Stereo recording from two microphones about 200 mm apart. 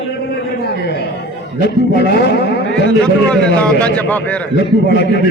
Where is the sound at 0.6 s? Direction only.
55° left (ahead or behind).